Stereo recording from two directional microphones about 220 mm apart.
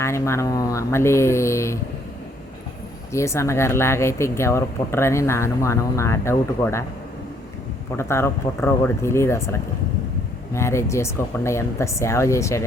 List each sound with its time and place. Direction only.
0.0 s speech: 10° left (ahead or behind)
3.1 s speech: 15° left (ahead or behind)
7.9 s speech: 10° left (ahead or behind)